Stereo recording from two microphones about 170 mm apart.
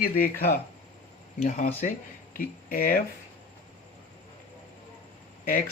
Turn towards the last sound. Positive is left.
turn(degrees=55)  # may be behind; listen again after turning